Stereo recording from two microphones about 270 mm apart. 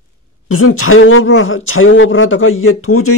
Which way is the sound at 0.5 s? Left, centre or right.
Left.